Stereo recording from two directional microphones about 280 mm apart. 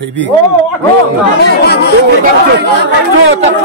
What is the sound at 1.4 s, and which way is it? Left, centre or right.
Speech, left.